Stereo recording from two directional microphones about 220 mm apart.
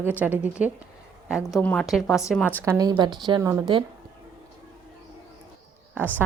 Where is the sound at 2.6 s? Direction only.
15° right (ahead or behind).